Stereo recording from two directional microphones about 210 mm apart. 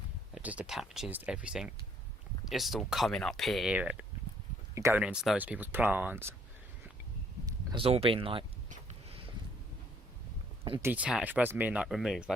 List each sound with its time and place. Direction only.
0.3 s speech: 5° right (ahead or behind)
7.4 s speech: 20° right (ahead or behind)
10.8 s speech: 5° right (ahead or behind)